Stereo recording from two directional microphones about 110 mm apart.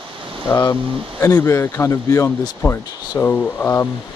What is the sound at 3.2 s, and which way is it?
Speech, 15° left (ahead or behind).